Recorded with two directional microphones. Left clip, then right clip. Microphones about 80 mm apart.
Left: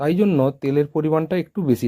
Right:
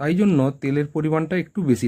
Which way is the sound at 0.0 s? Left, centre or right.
Left.